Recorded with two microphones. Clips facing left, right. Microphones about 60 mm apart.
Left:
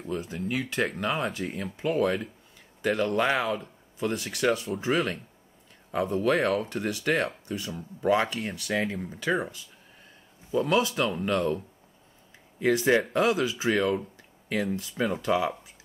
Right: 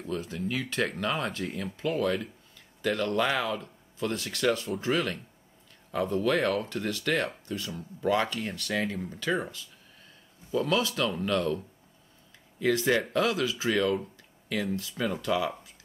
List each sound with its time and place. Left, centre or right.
0.1 s speech: centre
14.8 s speech: left